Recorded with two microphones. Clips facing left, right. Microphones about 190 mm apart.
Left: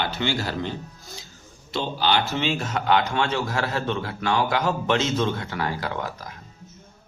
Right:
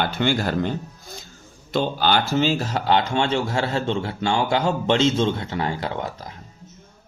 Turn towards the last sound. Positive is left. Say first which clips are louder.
# right 2 dB
turn(degrees=-25)  # may be behind; listen again after turning